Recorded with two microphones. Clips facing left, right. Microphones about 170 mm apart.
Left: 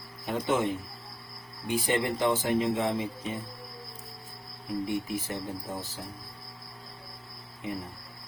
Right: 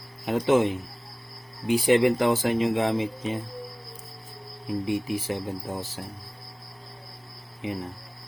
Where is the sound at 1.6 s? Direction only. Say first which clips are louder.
Right 8 dB; 90° right.